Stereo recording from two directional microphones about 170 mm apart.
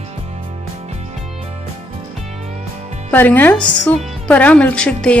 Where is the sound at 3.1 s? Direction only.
10° left (ahead or behind).